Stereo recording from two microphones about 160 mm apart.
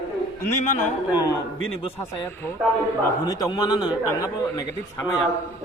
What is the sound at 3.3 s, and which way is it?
A man's voice, 25° left (ahead or behind).